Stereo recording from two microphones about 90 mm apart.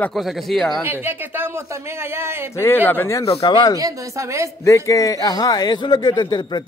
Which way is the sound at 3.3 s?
70° left (ahead or behind).